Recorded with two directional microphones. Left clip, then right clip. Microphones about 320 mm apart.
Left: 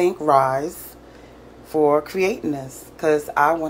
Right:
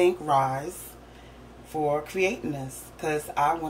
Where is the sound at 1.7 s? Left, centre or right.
Left.